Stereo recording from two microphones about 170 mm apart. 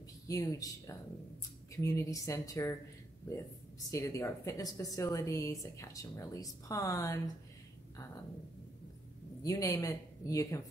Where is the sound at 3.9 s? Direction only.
20° left (ahead or behind).